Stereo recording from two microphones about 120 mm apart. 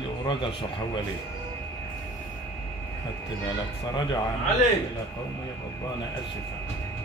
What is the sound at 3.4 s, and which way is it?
Music, 40° left (ahead or behind).